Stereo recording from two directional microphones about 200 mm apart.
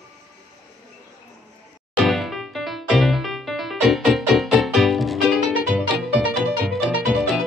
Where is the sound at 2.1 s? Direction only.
Centre (ahead or behind).